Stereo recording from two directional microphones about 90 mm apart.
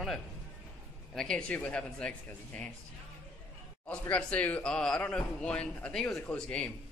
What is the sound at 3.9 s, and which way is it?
Speech, 15° left (ahead or behind).